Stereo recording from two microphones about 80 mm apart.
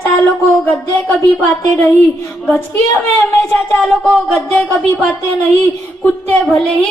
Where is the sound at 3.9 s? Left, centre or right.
Centre.